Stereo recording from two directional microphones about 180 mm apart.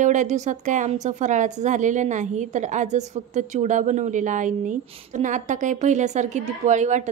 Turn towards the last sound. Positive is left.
turn(degrees=-40)  # may be behind; listen again after turning